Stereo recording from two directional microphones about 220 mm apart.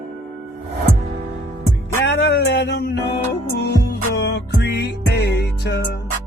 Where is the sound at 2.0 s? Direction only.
50° left (ahead or behind).